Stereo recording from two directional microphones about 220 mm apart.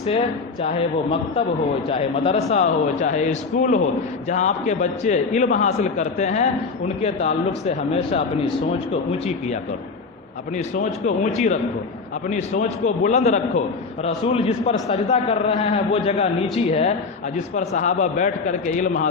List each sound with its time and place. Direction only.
1.9 s a man's voice: 25° left (ahead or behind)
10.8 s a man's voice: 30° left (ahead or behind)